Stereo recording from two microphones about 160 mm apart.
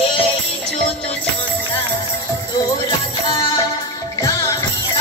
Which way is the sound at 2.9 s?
25° left (ahead or behind).